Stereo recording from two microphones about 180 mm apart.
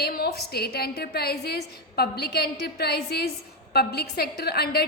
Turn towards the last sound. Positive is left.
turn(degrees=60)  # may be behind; listen again after turning